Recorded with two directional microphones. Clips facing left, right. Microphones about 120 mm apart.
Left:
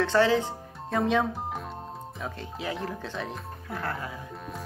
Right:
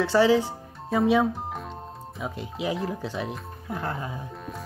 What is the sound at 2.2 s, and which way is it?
Speech, 15° right (ahead or behind).